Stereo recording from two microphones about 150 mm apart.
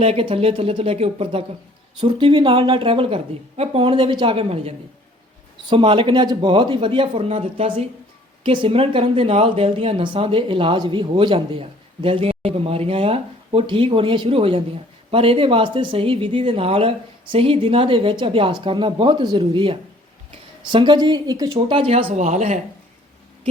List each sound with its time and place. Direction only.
0.0 s speech: 40° right (ahead or behind)